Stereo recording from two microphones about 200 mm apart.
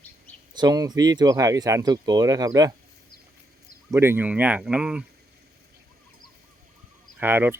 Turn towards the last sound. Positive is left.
turn(degrees=-10)  # may be behind; listen again after turning